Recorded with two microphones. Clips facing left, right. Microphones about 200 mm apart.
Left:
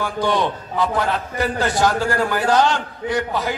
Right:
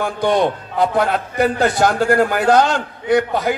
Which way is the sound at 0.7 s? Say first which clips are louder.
Right 4 dB; 55° right (ahead or behind).